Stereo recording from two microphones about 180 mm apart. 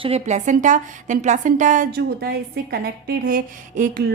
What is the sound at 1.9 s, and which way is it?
A woman's voice, 60° right (ahead or behind).